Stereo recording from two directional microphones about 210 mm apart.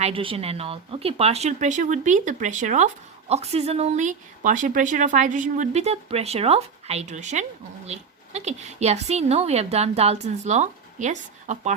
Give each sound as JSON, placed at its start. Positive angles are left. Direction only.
{"t": 0.0, "sound": "speech", "side_deg": -25}